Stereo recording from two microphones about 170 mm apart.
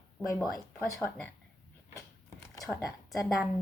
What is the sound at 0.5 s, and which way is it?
Speech, 20° left (ahead or behind).